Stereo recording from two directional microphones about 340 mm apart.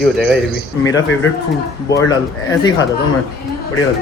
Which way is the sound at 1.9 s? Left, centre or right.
Centre.